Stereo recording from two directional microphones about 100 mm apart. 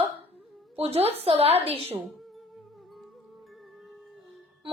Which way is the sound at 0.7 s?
80° right.